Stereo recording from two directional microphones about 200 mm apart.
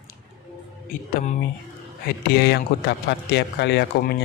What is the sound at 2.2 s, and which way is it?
A man's voice, 55° left (ahead or behind).